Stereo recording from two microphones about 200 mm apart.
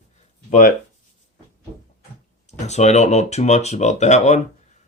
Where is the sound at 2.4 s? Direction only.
35° left (ahead or behind).